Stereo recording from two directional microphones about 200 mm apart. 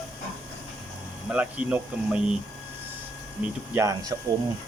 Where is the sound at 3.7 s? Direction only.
15° right (ahead or behind).